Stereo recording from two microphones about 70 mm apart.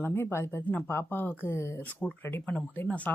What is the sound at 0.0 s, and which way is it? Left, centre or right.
Speech, left.